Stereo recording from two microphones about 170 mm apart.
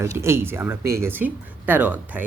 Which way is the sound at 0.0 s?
15° right (ahead or behind).